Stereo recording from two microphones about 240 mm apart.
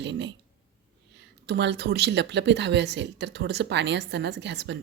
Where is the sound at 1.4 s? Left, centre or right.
Right.